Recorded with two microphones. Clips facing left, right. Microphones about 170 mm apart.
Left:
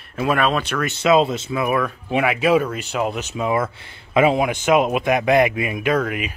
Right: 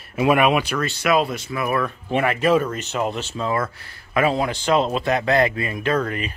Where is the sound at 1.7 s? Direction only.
5° left (ahead or behind).